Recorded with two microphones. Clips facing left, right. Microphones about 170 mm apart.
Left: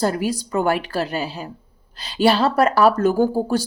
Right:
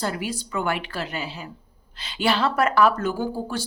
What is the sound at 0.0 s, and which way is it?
A woman's voice, 40° left (ahead or behind).